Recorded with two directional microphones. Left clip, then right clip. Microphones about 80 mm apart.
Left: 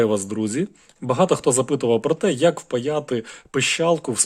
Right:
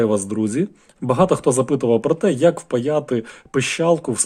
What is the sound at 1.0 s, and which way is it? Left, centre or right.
Speech, centre.